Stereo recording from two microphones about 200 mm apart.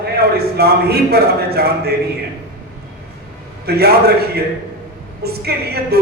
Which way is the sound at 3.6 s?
50° right (ahead or behind).